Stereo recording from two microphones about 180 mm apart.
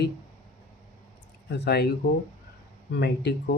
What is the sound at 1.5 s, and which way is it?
Speech, 65° left (ahead or behind).